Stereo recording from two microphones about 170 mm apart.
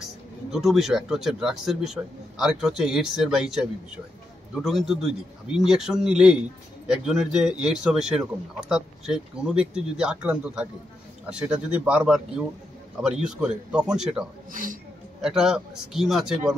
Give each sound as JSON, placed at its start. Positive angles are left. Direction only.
{"t": 0.0, "sound": "speech", "side_deg": 0}
{"t": 14.5, "sound": "speech", "side_deg": -55}
{"t": 15.2, "sound": "speech", "side_deg": -5}